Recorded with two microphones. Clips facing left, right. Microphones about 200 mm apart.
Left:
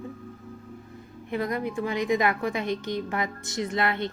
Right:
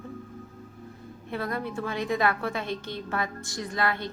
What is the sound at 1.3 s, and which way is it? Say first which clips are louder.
A woman's voice: left 3 dB; 15° left (ahead or behind).